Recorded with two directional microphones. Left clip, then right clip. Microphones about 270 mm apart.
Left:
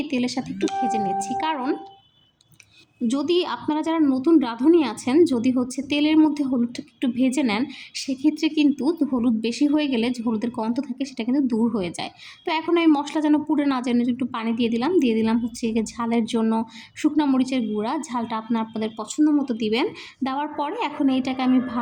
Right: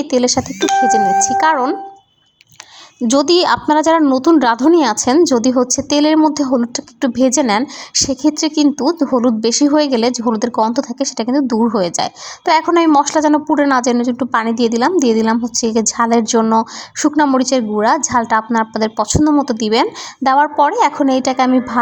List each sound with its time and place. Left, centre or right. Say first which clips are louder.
0.1 s a woman's voice: right 12 dB; right
3.1 s a woman's voice: right 11 dB; right